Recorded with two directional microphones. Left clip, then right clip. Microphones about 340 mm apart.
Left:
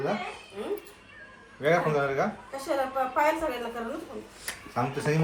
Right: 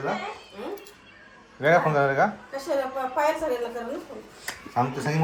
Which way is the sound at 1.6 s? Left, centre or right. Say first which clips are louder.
Right 4 dB; right.